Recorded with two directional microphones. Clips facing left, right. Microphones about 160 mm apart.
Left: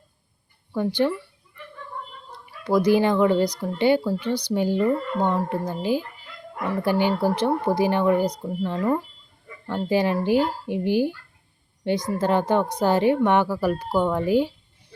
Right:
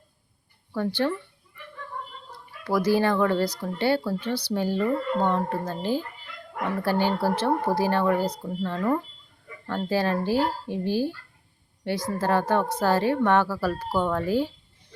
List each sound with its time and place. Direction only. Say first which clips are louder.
0.7 s speech: left 3 dB; 15° left (ahead or behind)
2.6 s speech: left 3 dB; 20° left (ahead or behind)